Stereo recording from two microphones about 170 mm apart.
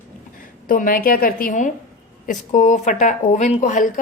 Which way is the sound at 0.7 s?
55° left (ahead or behind).